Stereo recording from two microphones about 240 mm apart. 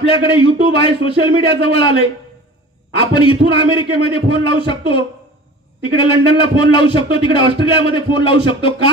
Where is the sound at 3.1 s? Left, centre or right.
Left.